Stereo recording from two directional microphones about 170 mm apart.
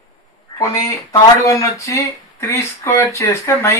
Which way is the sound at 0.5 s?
20° left (ahead or behind).